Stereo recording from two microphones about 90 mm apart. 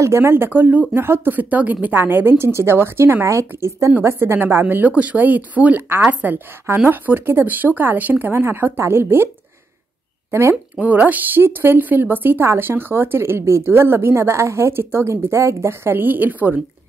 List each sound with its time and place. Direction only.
0.0 s a woman's voice: 30° right (ahead or behind)
10.5 s a woman's voice: 15° right (ahead or behind)